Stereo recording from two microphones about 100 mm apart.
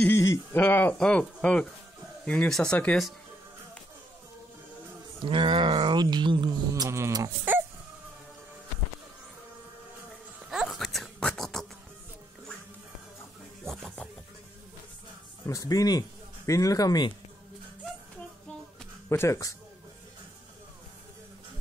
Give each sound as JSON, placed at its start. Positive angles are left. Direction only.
{"t": 0.0, "sound": "speech", "side_deg": 25}
{"t": 0.9, "sound": "speech", "side_deg": 10}
{"t": 5.2, "sound": "speech", "side_deg": -55}
{"t": 6.7, "sound": "speech", "side_deg": -30}
{"t": 10.5, "sound": "a sound", "side_deg": 0}
{"t": 13.7, "sound": "music", "side_deg": 5}
{"t": 15.4, "sound": "speech", "side_deg": 35}
{"t": 19.0, "sound": "speech", "side_deg": 30}